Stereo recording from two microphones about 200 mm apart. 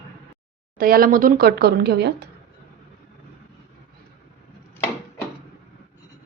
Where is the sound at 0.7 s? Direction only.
45° right (ahead or behind).